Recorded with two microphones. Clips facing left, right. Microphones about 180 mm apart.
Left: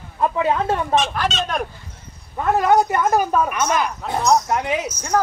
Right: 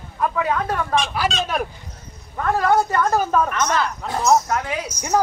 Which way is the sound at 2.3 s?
20° left (ahead or behind).